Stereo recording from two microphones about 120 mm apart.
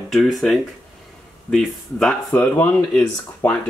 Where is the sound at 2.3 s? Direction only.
20° left (ahead or behind).